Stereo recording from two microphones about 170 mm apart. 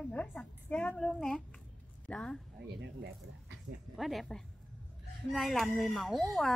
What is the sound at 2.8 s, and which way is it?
Speech, 90° right.